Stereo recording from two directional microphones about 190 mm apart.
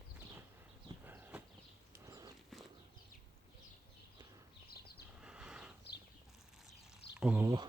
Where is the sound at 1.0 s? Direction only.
10° right (ahead or behind).